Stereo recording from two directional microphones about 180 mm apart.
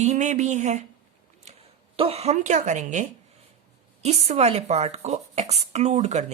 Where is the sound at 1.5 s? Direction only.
35° right (ahead or behind).